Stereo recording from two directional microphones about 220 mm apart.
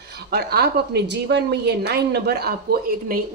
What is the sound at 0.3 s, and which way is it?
A woman's voice, 45° right (ahead or behind).